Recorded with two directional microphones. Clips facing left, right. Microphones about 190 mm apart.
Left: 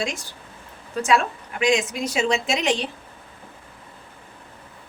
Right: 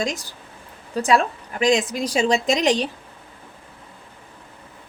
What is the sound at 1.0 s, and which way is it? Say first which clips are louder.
A woman's voice: right 2 dB; 35° right (ahead or behind).